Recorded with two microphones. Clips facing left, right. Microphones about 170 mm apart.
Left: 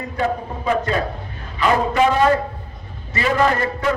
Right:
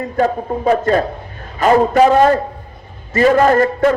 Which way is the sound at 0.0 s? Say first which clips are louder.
Right 6 dB; 45° right (ahead or behind).